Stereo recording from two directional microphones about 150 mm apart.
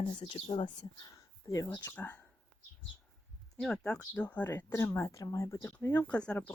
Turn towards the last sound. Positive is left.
turn(degrees=10)  # may be behind; listen again after turning